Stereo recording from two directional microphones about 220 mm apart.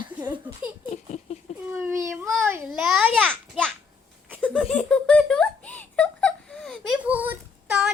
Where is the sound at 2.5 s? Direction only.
5° right (ahead or behind).